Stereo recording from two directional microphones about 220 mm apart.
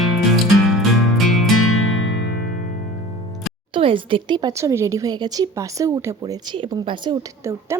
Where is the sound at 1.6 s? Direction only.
75° left (ahead or behind).